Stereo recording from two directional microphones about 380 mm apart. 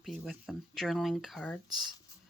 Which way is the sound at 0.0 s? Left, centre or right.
Centre.